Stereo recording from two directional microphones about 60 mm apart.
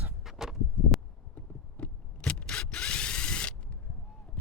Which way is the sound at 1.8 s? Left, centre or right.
Centre.